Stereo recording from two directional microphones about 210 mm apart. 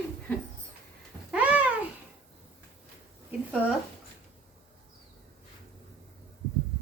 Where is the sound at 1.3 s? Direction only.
5° right (ahead or behind).